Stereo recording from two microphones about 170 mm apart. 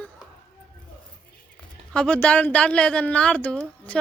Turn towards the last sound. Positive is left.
turn(degrees=5)  # may be behind; listen again after turning